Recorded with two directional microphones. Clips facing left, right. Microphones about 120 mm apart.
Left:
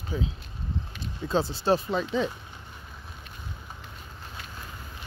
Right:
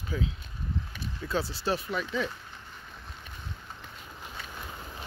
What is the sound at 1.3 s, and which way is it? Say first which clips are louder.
Speech: left 6 dB; 25° left (ahead or behind).